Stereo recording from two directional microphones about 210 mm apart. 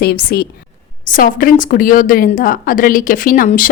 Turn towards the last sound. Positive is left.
turn(degrees=40)  # may be behind; listen again after turning